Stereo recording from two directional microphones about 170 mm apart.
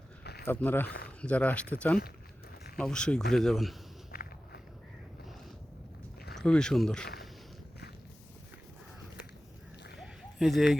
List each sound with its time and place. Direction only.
0.4 s speech: 10° left (ahead or behind)
4.1 s walk: 60° left (ahead or behind)
6.3 s speech: 5° left (ahead or behind)
10.0 s a sound: centre (ahead or behind)